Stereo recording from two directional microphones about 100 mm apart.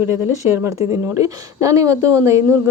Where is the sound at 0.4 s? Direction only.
15° right (ahead or behind).